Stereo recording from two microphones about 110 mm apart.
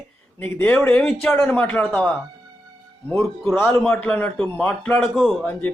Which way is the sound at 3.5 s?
20° left (ahead or behind).